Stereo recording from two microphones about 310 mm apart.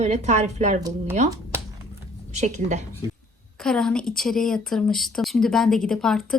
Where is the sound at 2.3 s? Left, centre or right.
Right.